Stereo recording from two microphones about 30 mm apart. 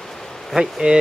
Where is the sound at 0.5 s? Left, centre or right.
Centre.